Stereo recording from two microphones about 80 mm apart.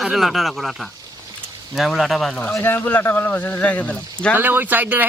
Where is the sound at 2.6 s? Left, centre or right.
Left.